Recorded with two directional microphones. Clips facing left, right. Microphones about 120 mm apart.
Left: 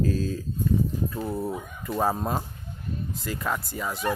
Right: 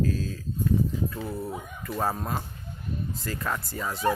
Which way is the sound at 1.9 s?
10° left (ahead or behind).